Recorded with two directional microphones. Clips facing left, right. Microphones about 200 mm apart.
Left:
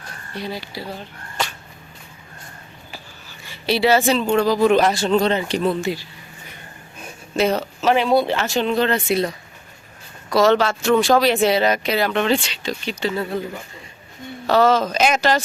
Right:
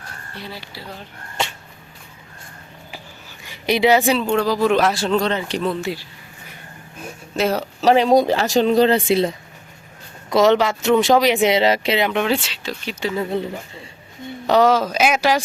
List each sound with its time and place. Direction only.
0.3 s speech: 15° left (ahead or behind)
1.4 s a sound: 25° right (ahead or behind)
2.9 s a sound: 15° right (ahead or behind)
4.2 s speech: centre (ahead or behind)
7.3 s speech: centre (ahead or behind)
7.8 s speech: 35° right (ahead or behind); by 12.2 s 20° right (ahead or behind)
12.2 s speech: 5° right (ahead or behind)
14.4 s speech: 15° right (ahead or behind)